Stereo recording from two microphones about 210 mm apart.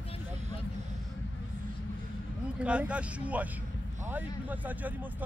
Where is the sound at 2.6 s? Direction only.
5° right (ahead or behind).